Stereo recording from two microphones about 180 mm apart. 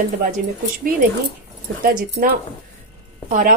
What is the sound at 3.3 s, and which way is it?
Speech, 50° right (ahead or behind).